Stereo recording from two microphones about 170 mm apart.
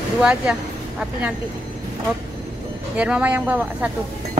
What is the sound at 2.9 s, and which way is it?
Speech, 5° right (ahead or behind).